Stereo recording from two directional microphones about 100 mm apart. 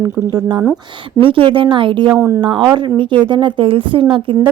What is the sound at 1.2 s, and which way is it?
Speech, 60° right (ahead or behind).